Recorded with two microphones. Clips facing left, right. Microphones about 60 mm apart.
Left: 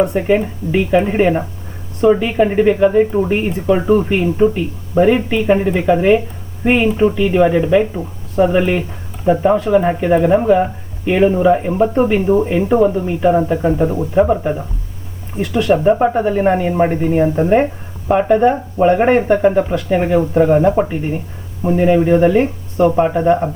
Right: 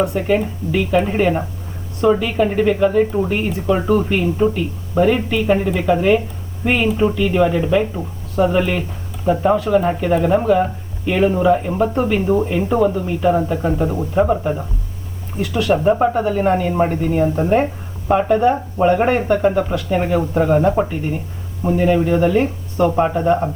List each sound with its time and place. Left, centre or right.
0.1 s speech: left